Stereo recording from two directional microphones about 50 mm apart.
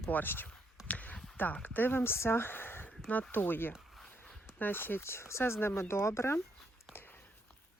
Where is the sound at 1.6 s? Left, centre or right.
Left.